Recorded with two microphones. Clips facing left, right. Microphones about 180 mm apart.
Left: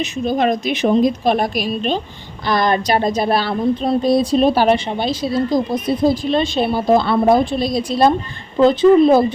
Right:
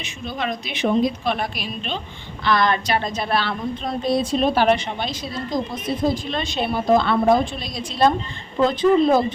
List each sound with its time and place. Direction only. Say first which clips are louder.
0.0 s a woman's voice: left 10 dB; 45° left (ahead or behind)